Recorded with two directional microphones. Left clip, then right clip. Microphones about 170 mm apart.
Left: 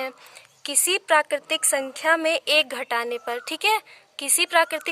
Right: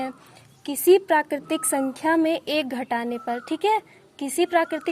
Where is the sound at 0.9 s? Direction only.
15° left (ahead or behind).